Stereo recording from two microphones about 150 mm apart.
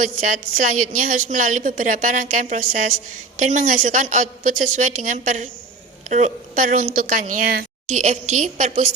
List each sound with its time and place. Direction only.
0.5 s a woman's voice: 60° right (ahead or behind)
7.9 s a woman's voice: 50° right (ahead or behind)